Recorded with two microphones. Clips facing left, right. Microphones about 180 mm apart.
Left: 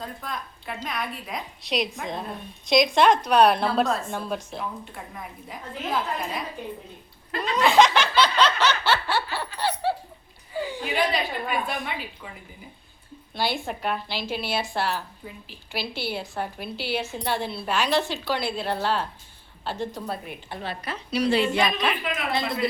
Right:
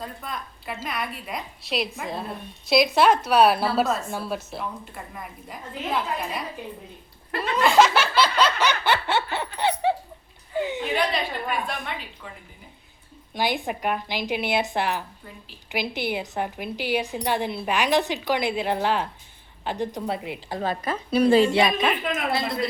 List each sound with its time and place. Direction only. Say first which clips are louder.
0.0 s a woman's voice: even; centre (ahead or behind)
7.5 s laughter: even; centre (ahead or behind); by 9.9 s 20° right (ahead or behind)
10.6 s chuckle: right 3 dB; 20° right (ahead or behind)
10.8 s a woman's voice: even; 5° left (ahead or behind)
13.3 s a woman's voice: right 2 dB; 15° right (ahead or behind)
20.5 s a woman's voice: right 6 dB; 40° right (ahead or behind)
22.3 s a woman's voice: left 1 dB; centre (ahead or behind)